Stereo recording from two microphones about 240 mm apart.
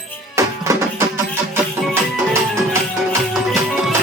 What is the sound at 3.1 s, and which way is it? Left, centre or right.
Music, centre.